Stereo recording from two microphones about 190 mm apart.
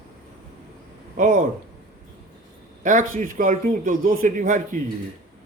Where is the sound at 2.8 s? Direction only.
45° right (ahead or behind).